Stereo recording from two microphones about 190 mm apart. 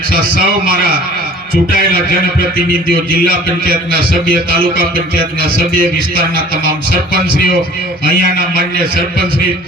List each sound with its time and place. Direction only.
0.1 s a man's voice: 50° right (ahead or behind)
3.1 s a man's voice: 50° right (ahead or behind)
8.0 s a man's voice: 50° right (ahead or behind)